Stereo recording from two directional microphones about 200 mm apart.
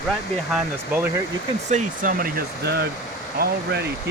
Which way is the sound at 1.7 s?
45° right (ahead or behind).